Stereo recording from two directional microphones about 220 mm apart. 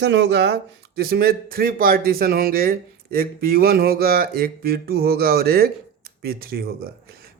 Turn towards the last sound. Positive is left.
turn(degrees=-45)  # may be behind; listen again after turning